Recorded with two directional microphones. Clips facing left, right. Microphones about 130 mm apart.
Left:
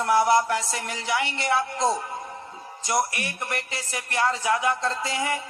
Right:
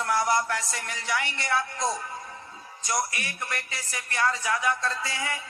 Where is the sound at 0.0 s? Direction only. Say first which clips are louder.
Left 5 dB; 25° left (ahead or behind).